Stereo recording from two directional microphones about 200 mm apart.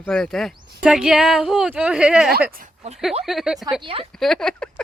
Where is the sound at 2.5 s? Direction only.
40° right (ahead or behind).